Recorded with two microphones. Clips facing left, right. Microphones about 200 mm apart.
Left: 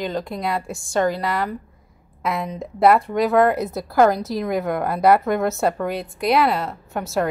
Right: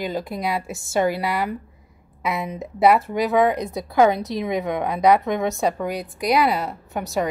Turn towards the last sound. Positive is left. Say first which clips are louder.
# left 1 dB
turn(degrees=0)  # may be behind; listen again after turning